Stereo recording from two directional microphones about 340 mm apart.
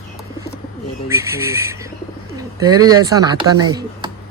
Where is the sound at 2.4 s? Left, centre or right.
Centre.